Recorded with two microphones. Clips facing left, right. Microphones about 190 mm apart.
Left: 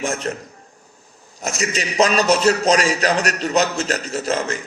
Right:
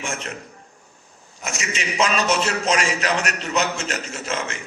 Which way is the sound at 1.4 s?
35° left (ahead or behind).